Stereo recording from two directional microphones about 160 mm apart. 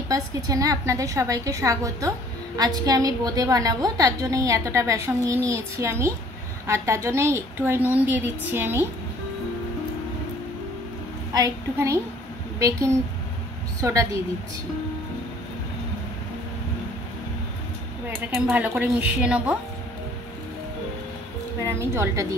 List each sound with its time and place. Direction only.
0.1 s a woman's voice: 20° right (ahead or behind)
11.3 s a woman's voice: 20° right (ahead or behind)
18.2 s a woman's voice: 10° right (ahead or behind)
21.6 s a woman's voice: 15° right (ahead or behind)